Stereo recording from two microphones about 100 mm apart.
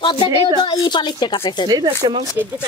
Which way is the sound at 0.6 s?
45° left (ahead or behind).